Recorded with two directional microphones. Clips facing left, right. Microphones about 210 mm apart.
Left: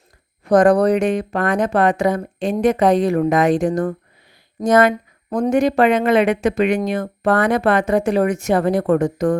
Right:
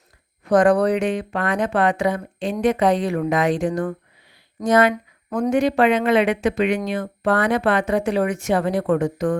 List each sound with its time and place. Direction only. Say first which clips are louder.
0.5 s speech: left 3 dB; 40° left (ahead or behind)